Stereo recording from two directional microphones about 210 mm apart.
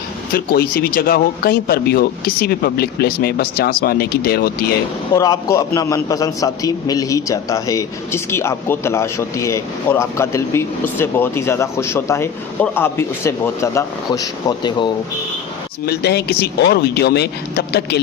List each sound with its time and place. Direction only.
0.3 s speech: 45° left (ahead or behind)
5.1 s a man's voice: 15° left (ahead or behind)
15.9 s speech: 50° left (ahead or behind)